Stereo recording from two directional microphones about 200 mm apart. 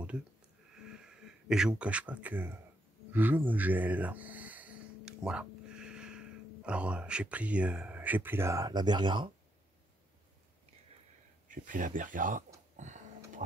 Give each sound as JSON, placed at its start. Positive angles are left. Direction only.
{"t": 0.9, "sound": "speech", "side_deg": -5}
{"t": 11.4, "sound": "speech", "side_deg": -40}
{"t": 12.7, "sound": "a sound", "side_deg": -35}